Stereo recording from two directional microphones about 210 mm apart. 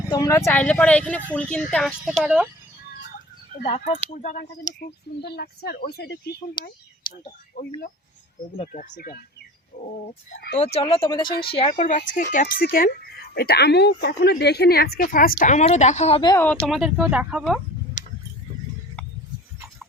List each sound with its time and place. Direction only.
0.1 s speech: 15° left (ahead or behind); by 2.5 s 5° right (ahead or behind)
4.1 s speech: 40° left (ahead or behind)
6.6 s speech: 20° left (ahead or behind)
7.6 s speech: 40° left (ahead or behind)
10.8 s speech: 25° left (ahead or behind)
11.3 s speech: 45° left (ahead or behind)
11.5 s speech: 30° left (ahead or behind)
16.6 s speech: centre (ahead or behind)